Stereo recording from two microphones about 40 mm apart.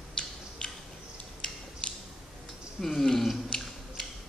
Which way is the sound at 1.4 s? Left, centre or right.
Centre.